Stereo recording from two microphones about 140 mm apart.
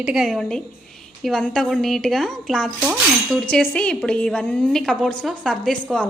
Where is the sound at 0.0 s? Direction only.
5° right (ahead or behind).